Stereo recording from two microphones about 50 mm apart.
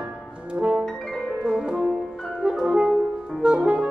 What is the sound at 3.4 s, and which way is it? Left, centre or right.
Music, right.